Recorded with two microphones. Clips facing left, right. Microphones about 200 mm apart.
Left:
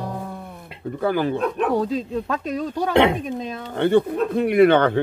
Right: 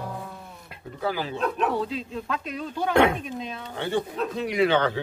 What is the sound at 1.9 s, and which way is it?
Speech, 40° left (ahead or behind).